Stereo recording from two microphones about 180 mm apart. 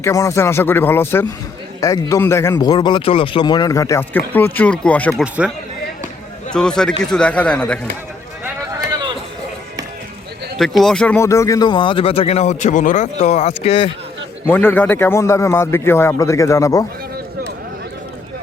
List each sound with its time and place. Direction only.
0.0 s a man's voice: 15° left (ahead or behind)
6.5 s speech: 5° left (ahead or behind)
8.7 s a sound: 25° right (ahead or behind)
10.6 s speech: centre (ahead or behind); by 13.9 s 30° left (ahead or behind)
14.4 s a man's voice: 10° left (ahead or behind)